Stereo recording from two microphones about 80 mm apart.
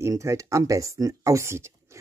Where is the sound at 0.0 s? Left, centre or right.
Right.